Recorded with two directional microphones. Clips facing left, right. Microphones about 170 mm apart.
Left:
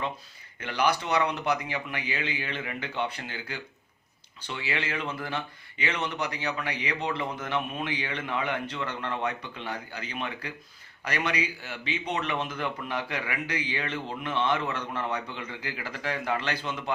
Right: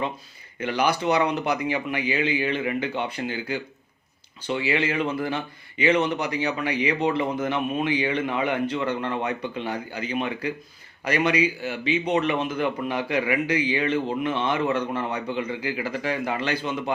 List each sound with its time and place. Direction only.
0.6 s a man's voice: 10° right (ahead or behind)